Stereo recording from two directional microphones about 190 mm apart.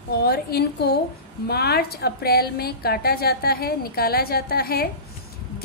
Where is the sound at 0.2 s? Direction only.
55° left (ahead or behind).